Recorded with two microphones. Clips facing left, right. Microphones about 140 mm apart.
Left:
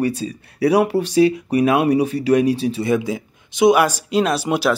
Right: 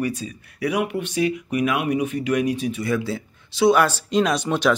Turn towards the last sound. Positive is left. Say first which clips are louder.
# left 2 dB
turn(degrees=10)  # may be behind; listen again after turning